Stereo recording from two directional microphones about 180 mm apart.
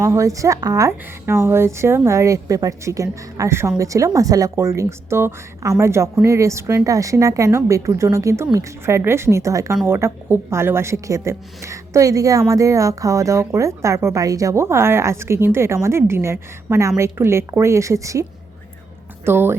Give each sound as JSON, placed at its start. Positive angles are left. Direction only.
{"t": 0.0, "sound": "a woman's voice", "side_deg": -15}